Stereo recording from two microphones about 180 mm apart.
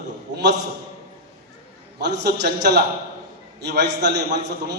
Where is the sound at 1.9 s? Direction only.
70° right (ahead or behind).